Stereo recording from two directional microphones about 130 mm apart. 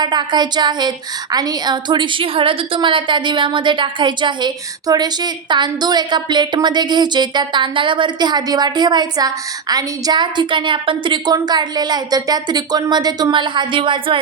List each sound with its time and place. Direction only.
0.0 s a woman's voice: 35° right (ahead or behind)